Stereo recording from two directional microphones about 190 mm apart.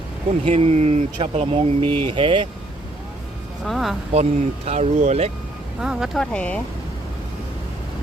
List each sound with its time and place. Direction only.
0.4 s speech: 35° right (ahead or behind)
3.6 s speech: centre (ahead or behind)
4.1 s speech: 35° right (ahead or behind)
5.8 s speech: 5° right (ahead or behind)